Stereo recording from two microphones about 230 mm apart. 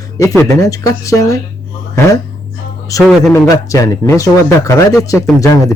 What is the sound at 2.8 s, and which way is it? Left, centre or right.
Speech, centre.